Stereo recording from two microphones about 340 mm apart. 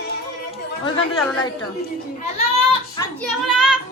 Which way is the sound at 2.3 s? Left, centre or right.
Centre.